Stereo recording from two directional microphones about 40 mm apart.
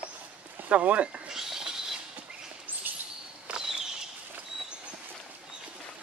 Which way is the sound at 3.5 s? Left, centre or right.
Right.